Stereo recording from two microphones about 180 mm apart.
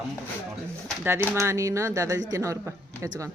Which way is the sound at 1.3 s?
15° right (ahead or behind).